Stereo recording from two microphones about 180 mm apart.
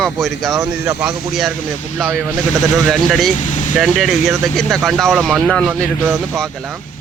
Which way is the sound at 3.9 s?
Centre (ahead or behind).